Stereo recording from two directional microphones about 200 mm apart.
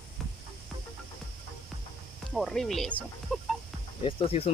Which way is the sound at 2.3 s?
Centre (ahead or behind).